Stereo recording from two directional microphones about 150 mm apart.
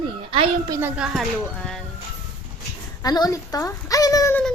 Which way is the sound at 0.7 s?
15° right (ahead or behind).